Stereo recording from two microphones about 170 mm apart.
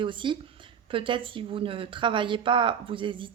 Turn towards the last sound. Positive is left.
turn(degrees=-30)  # may be behind; listen again after turning